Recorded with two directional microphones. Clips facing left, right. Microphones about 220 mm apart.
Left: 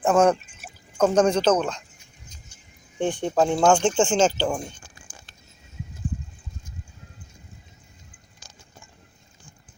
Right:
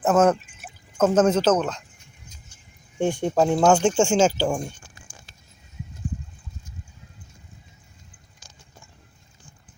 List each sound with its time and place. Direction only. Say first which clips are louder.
0.0 s speech: even; 5° right (ahead or behind)
3.0 s speech: right 1 dB; 10° right (ahead or behind)